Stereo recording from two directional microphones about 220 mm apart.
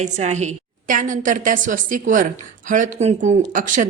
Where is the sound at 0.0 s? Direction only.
30° right (ahead or behind).